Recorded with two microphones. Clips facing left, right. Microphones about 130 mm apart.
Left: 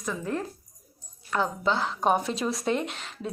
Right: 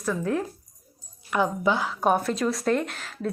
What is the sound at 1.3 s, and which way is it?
Speech, 15° right (ahead or behind).